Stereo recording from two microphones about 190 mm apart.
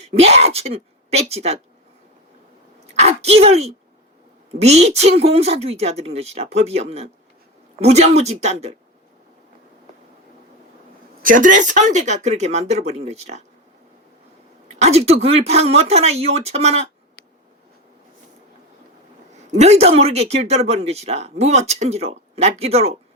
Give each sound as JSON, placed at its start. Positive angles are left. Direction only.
{"t": 0.0, "sound": "speech", "side_deg": -35}
{"t": 2.8, "sound": "speech", "side_deg": -35}
{"t": 11.2, "sound": "speech", "side_deg": -45}
{"t": 14.7, "sound": "speech", "side_deg": -35}
{"t": 19.5, "sound": "speech", "side_deg": -35}